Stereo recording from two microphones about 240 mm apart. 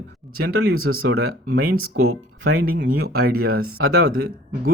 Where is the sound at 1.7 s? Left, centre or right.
Right.